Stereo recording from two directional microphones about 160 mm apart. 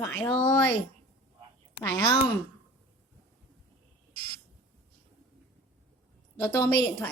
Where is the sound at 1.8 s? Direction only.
15° left (ahead or behind).